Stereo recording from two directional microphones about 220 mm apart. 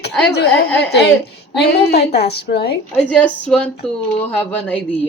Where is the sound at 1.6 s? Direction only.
50° left (ahead or behind).